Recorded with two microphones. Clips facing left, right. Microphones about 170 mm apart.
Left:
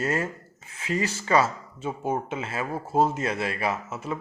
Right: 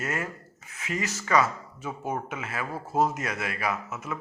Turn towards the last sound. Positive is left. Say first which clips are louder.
# left 2 dB
turn(degrees=30)  # may be behind; listen again after turning